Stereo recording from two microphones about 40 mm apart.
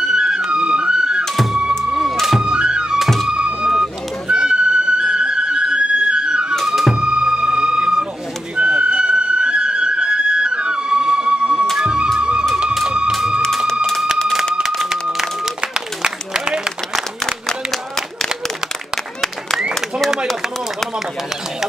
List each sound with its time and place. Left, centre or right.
0.1 s music: centre
1.2 s music: centre
1.5 s music: centre
2.4 s music: right
6.6 s music: centre
7.0 s music: right
15.6 s a sound: centre
17.3 s a sound: centre